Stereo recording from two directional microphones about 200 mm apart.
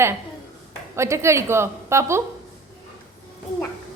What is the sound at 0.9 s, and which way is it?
A woman's voice, 15° right (ahead or behind).